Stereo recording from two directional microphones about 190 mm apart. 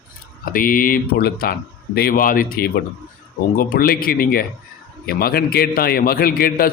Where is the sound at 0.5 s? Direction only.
45° left (ahead or behind).